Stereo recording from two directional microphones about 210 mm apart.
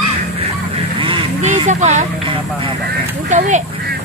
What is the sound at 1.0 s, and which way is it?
Honk, 25° right (ahead or behind).